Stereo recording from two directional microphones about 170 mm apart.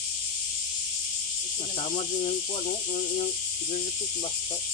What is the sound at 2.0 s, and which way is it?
Speech, 35° left (ahead or behind).